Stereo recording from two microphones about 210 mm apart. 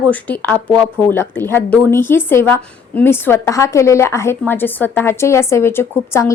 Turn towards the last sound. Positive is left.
turn(degrees=10)  # may be behind; listen again after turning